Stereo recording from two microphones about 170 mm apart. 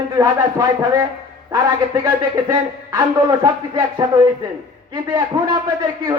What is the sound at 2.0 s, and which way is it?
A man's voice, 20° right (ahead or behind).